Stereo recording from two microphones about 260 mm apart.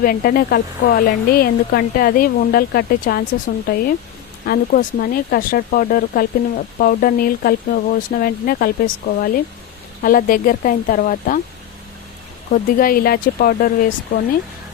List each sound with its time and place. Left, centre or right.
0.0 s speech: left
12.5 s speech: left